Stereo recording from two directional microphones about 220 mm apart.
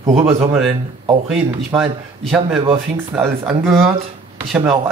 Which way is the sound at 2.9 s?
10° right (ahead or behind).